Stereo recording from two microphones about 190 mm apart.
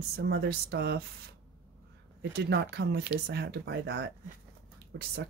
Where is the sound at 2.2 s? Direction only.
60° right (ahead or behind).